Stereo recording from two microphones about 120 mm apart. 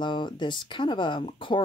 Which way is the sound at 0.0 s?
40° left (ahead or behind).